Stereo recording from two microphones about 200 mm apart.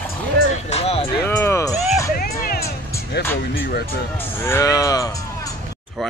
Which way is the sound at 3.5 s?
50° left (ahead or behind).